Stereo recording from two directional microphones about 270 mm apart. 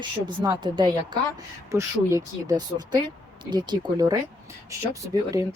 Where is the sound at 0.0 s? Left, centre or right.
Centre.